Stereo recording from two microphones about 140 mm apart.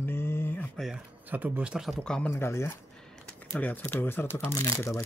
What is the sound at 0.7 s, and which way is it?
Speech, centre (ahead or behind).